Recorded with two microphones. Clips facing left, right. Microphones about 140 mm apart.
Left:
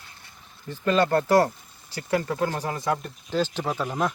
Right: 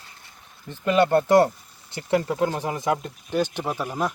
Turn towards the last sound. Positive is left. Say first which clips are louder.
# even
turn(degrees=-10)  # may be behind; listen again after turning